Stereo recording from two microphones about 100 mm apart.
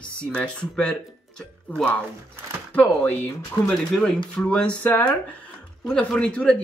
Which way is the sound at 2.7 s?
15° left (ahead or behind).